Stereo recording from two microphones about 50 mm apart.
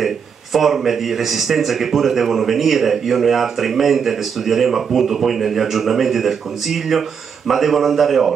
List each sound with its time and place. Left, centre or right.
0.0 s speech: centre